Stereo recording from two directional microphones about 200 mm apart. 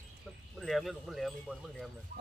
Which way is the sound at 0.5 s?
Centre (ahead or behind).